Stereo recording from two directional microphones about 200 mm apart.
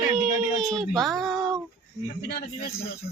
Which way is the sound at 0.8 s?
Centre (ahead or behind).